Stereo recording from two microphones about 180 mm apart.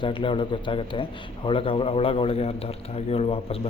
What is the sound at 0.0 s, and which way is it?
A man's voice, 30° left (ahead or behind).